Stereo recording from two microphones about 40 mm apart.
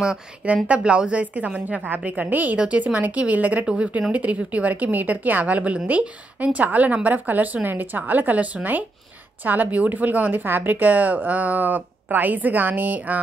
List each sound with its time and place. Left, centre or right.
0.7 s a woman's voice: right
2.5 s a woman's voice: right
10.4 s a woman's voice: right